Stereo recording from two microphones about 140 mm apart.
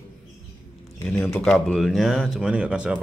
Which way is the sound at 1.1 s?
15° left (ahead or behind).